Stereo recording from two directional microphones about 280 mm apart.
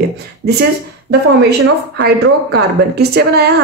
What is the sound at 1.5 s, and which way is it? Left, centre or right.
A woman's voice, right.